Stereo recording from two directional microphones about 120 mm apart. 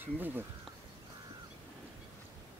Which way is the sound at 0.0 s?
15° right (ahead or behind).